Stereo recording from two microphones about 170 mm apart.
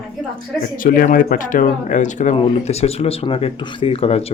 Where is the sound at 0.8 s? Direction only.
55° left (ahead or behind).